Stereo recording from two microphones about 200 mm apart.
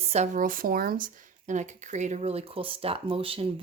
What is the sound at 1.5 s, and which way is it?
Speech, 35° right (ahead or behind).